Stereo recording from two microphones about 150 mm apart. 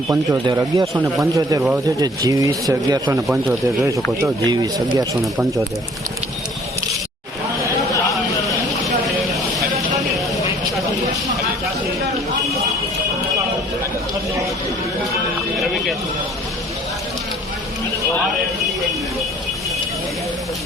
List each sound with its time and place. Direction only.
0.1 s speech: 20° right (ahead or behind)
4.4 s speech: 25° right (ahead or behind)
8.1 s vehicle: centre (ahead or behind)
15.5 s a sound: centre (ahead or behind)